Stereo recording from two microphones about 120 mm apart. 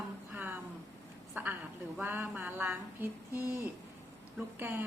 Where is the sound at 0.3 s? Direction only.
15° right (ahead or behind).